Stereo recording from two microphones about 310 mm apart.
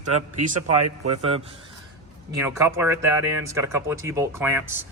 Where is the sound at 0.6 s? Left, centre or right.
Right.